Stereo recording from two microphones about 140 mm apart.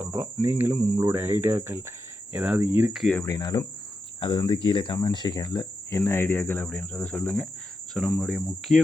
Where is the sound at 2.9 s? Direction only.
Centre (ahead or behind).